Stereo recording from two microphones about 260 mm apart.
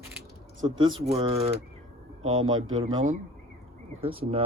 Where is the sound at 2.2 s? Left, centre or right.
Right.